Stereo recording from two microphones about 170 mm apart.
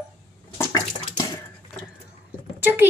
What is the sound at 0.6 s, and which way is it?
Bathtub, 20° left (ahead or behind).